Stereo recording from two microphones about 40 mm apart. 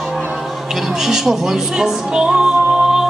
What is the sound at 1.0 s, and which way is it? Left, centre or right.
Speech, centre.